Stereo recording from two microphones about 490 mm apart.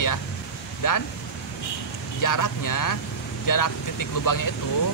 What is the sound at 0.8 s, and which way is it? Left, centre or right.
Speech, left.